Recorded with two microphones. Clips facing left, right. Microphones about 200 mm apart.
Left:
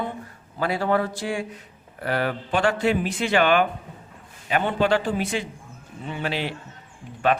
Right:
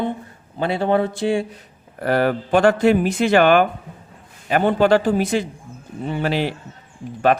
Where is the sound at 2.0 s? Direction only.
45° right (ahead or behind).